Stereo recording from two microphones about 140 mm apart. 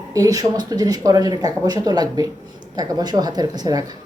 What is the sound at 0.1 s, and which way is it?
Speech, 25° right (ahead or behind).